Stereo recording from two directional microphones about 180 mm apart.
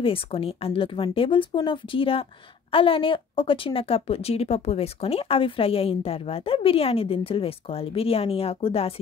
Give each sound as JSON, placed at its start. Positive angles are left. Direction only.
{"t": 0.0, "sound": "a woman's voice", "side_deg": 30}